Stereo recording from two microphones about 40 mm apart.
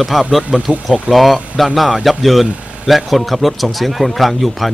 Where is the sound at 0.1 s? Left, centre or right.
Centre.